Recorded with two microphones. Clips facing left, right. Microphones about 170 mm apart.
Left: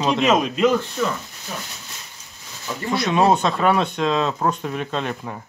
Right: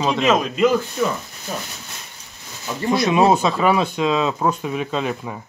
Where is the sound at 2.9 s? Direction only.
10° right (ahead or behind).